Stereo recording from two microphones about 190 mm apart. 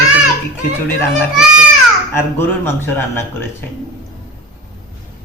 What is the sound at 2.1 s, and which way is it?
Speech, 10° left (ahead or behind).